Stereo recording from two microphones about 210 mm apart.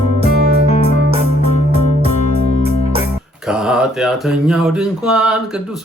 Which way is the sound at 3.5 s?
Centre (ahead or behind).